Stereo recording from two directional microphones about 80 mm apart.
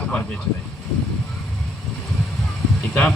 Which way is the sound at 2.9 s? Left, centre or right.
Centre.